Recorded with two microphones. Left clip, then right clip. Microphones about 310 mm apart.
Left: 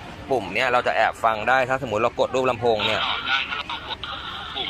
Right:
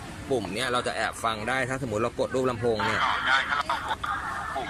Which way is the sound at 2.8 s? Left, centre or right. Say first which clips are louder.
Left 2 dB; centre.